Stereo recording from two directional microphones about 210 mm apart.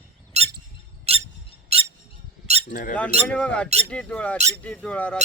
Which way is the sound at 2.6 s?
40° left (ahead or behind).